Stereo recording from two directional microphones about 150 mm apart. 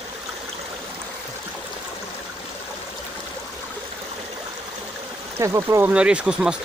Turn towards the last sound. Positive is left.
turn(degrees=-5)  # may be behind; listen again after turning